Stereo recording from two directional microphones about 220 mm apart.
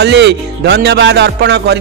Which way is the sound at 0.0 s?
50° right (ahead or behind).